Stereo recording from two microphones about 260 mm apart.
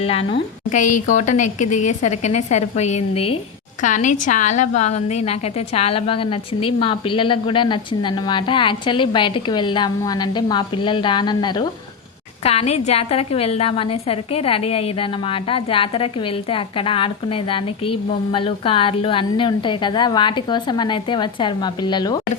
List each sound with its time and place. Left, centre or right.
0.0 s a woman's voice: left